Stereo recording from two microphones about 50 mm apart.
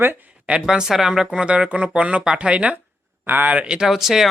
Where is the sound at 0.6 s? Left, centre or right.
Centre.